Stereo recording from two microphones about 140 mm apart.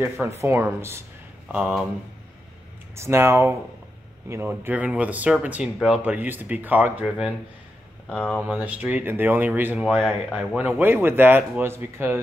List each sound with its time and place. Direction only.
0.4 s speech: 20° right (ahead or behind)
3.0 s speech: 20° right (ahead or behind)
8.1 s speech: 10° left (ahead or behind)
8.4 s speech: 10° right (ahead or behind)